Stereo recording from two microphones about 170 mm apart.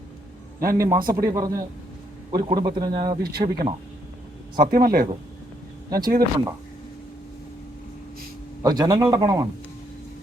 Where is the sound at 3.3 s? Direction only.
65° right (ahead or behind).